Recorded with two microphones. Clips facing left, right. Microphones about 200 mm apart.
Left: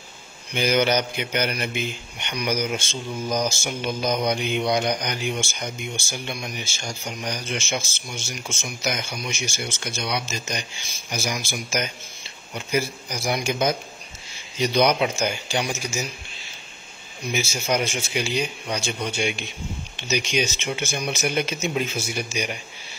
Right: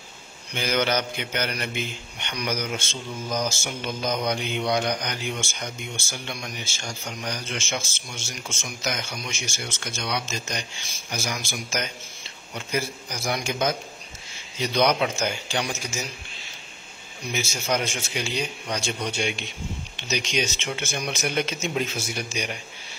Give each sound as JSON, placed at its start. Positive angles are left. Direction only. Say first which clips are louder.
{"t": 0.6, "sound": "speech", "louder": "left 4 dB", "side_deg": 15}
{"t": 17.3, "sound": "speech", "louder": "left 2 dB", "side_deg": 10}